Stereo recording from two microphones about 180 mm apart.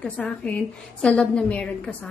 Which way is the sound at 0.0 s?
5° left (ahead or behind).